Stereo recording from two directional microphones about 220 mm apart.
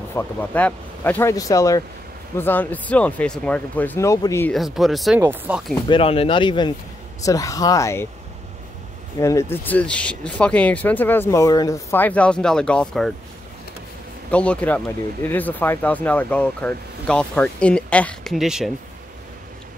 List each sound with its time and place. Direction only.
0.1 s speech: 10° left (ahead or behind)
4.6 s speech: centre (ahead or behind)
5.9 s speech: 25° left (ahead or behind)
9.2 s speech: 15° left (ahead or behind)
14.3 s speech: 5° left (ahead or behind)